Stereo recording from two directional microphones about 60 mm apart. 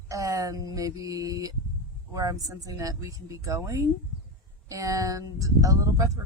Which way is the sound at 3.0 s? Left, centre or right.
Right.